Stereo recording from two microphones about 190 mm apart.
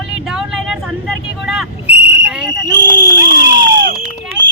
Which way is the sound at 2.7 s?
20° right (ahead or behind).